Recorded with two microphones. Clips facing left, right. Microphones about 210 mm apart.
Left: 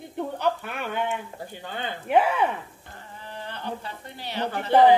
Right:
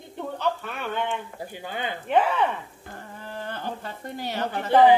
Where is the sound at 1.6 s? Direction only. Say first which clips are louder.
Right 2 dB; 10° right (ahead or behind).